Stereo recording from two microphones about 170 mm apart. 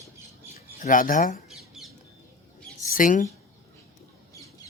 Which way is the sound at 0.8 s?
50° left (ahead or behind).